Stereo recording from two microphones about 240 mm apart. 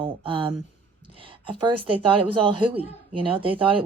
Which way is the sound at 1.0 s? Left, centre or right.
Right.